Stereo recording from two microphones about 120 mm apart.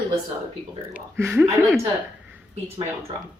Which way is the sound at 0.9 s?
20° right (ahead or behind).